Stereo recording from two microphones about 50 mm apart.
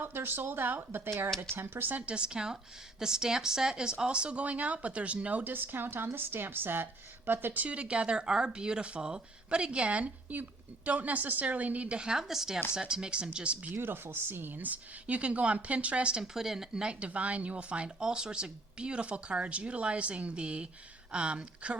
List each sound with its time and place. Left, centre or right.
0.0 s speech: right
2.0 s speech: right
7.6 s speech: right
13.7 s speech: right
15.0 s speech: right
16.2 s speech: centre; by 21.8 s right